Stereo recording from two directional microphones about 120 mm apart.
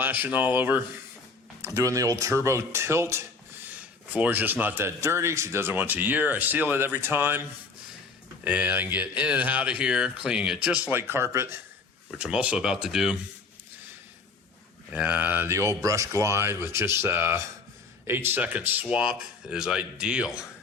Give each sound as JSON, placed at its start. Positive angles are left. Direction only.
{"t": 0.0, "sound": "speech", "side_deg": -15}
{"t": 8.4, "sound": "speech", "side_deg": -15}
{"t": 12.1, "sound": "speech", "side_deg": -10}
{"t": 14.9, "sound": "speech", "side_deg": -15}